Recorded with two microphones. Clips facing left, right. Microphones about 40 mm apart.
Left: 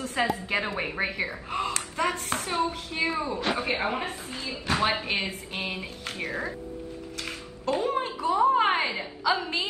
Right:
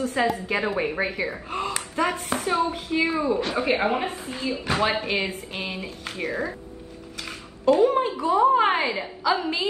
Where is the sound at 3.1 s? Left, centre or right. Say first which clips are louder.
Right 4 dB; right.